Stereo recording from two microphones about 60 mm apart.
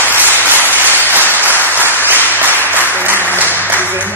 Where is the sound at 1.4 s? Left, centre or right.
Right.